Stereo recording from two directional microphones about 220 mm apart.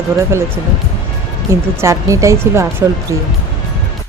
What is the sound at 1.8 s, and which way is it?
Speech, 15° right (ahead or behind).